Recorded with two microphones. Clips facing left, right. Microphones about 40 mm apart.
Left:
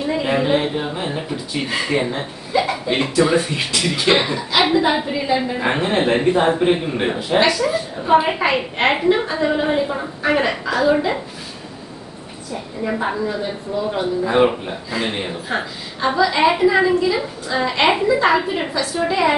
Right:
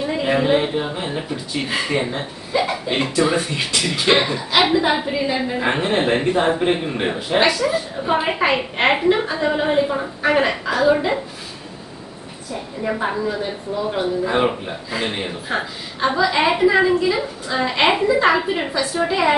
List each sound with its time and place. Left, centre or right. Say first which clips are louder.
0.1 s speech: even; centre
12.8 s a woman's voice: even; centre